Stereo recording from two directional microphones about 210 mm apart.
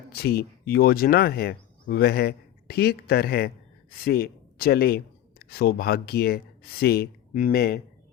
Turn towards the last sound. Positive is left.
turn(degrees=45)  # may be behind; listen again after turning